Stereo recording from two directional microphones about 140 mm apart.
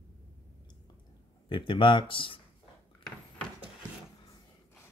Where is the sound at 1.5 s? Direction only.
35° left (ahead or behind).